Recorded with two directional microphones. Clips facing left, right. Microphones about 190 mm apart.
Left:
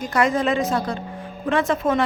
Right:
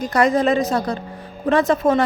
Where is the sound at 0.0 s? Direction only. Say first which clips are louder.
Right 3 dB; 40° right (ahead or behind).